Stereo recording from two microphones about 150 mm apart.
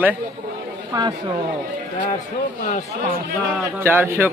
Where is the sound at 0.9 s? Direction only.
25° right (ahead or behind).